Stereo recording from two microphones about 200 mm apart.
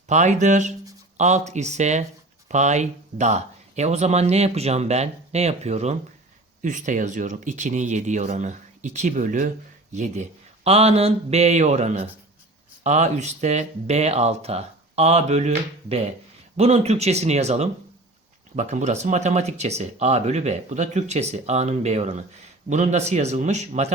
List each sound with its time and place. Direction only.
0.1 s speech: 35° right (ahead or behind)